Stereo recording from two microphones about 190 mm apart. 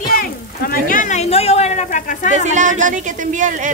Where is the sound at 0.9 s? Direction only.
40° left (ahead or behind).